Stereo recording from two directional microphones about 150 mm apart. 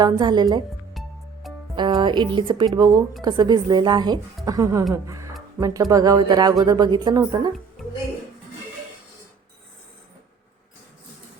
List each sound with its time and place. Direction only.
0.0 s speech: 30° right (ahead or behind)
0.9 s music: centre (ahead or behind)
1.7 s speech: 30° right (ahead or behind)
7.8 s music: centre (ahead or behind)